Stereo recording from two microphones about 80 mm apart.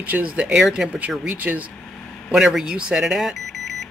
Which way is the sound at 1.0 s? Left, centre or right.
Centre.